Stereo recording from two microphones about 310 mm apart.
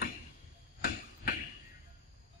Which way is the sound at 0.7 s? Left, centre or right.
Left.